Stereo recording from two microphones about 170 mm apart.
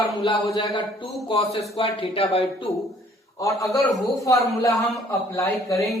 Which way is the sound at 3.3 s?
20° left (ahead or behind).